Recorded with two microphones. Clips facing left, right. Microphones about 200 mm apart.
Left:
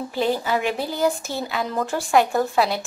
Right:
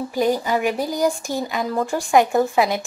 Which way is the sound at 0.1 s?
15° right (ahead or behind).